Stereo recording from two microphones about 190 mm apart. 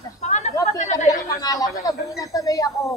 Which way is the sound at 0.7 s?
40° left (ahead or behind).